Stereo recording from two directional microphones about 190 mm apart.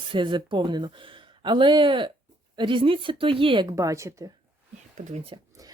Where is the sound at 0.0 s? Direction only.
25° right (ahead or behind).